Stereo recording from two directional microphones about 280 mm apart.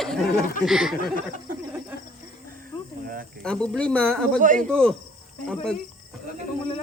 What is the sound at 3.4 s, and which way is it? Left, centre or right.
Speech, centre.